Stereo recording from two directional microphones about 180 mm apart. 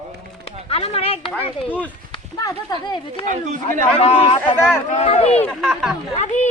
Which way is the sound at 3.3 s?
45° right (ahead or behind).